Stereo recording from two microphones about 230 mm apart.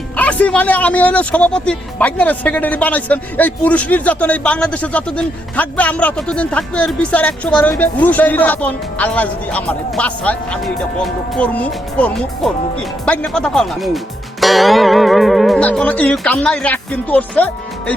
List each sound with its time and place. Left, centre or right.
0.2 s speech: centre